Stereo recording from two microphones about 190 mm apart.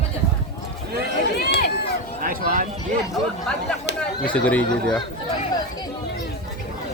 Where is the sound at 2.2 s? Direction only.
50° right (ahead or behind).